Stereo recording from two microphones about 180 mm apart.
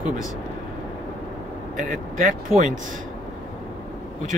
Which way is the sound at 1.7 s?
45° right (ahead or behind).